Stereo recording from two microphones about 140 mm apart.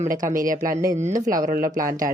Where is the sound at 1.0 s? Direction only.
55° right (ahead or behind).